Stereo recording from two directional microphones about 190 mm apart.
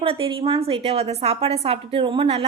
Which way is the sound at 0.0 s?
30° right (ahead or behind).